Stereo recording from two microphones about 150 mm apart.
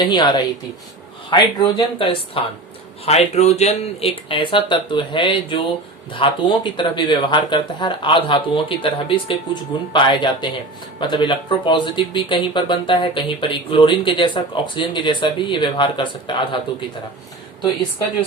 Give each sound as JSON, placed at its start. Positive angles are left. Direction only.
{"t": 0.0, "sound": "a woman's voice", "side_deg": 30}
{"t": 3.1, "sound": "speech", "side_deg": 45}